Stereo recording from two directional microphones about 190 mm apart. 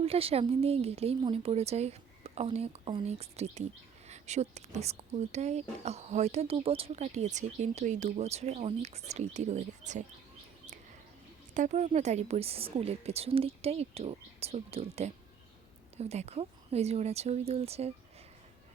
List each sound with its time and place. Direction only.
0.0 s speech: 30° right (ahead or behind)
11.5 s speech: 40° right (ahead or behind)